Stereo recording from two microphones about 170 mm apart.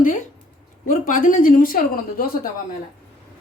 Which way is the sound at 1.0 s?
50° left (ahead or behind).